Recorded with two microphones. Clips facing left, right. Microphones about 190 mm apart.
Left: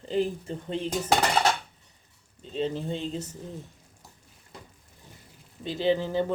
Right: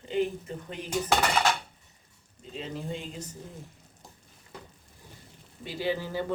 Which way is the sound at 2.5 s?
30° left (ahead or behind).